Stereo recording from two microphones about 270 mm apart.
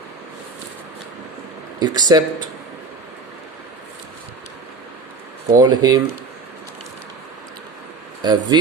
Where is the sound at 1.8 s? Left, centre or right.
Centre.